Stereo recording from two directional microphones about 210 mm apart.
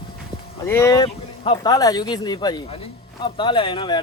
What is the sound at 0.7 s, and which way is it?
Speech, 15° left (ahead or behind).